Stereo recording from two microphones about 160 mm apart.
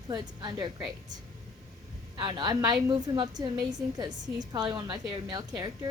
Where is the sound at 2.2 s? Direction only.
25° right (ahead or behind).